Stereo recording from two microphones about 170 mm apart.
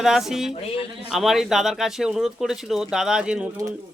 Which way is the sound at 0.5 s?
35° left (ahead or behind).